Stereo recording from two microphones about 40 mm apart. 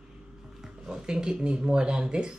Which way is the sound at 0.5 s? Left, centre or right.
Centre.